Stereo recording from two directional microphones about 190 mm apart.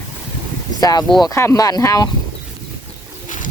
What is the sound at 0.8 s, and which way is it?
Speech, 20° left (ahead or behind).